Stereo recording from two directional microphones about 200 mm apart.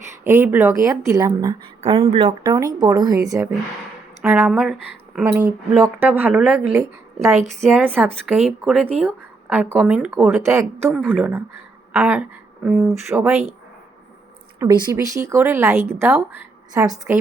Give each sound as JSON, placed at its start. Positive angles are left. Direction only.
{"t": 0.3, "sound": "a woman's voice", "side_deg": -10}
{"t": 1.8, "sound": "speech", "side_deg": -30}
{"t": 4.2, "sound": "a woman's voice", "side_deg": -5}
{"t": 7.9, "sound": "a woman's voice", "side_deg": -10}
{"t": 14.6, "sound": "a woman's voice", "side_deg": -15}